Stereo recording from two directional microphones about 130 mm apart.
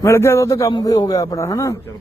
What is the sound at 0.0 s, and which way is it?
A man's voice, 20° left (ahead or behind).